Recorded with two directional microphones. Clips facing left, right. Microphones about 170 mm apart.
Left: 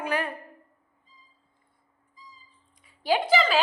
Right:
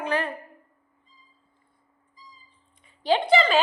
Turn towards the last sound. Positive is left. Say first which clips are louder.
# right 2 dB
turn(degrees=0)  # may be behind; listen again after turning